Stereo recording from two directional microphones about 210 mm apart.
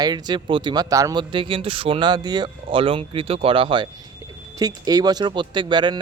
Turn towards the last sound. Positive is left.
turn(degrees=-20)  # may be behind; listen again after turning